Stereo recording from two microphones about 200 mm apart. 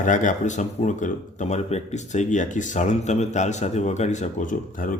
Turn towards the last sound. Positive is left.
turn(degrees=40)  # may be behind; listen again after turning